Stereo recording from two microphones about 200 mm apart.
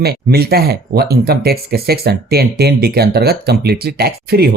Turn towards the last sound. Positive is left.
turn(degrees=-50)  # may be behind; listen again after turning